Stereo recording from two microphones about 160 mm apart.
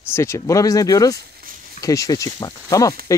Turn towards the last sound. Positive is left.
turn(degrees=20)  # may be behind; listen again after turning